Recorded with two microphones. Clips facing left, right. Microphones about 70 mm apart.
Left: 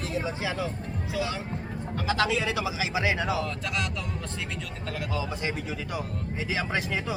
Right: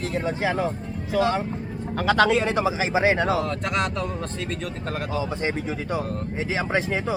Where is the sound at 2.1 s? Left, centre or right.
Right.